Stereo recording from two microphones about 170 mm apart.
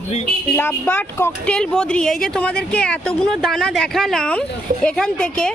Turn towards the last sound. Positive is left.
turn(degrees=5)  # may be behind; listen again after turning